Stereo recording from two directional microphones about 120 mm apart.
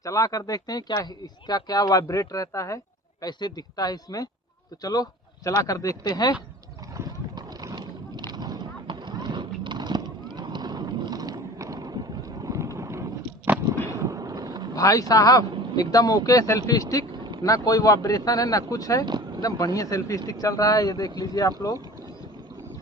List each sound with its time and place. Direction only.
0.0 s speech: 30° left (ahead or behind)
6.9 s a sound: 30° right (ahead or behind)
12.4 s boat: 25° right (ahead or behind)
14.8 s speech: 30° left (ahead or behind)
19.0 s speech: 35° right (ahead or behind)
19.4 s speech: 30° left (ahead or behind)